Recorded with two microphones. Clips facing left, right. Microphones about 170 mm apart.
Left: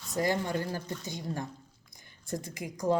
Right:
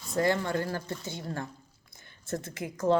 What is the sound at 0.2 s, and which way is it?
A woman's voice, 15° left (ahead or behind).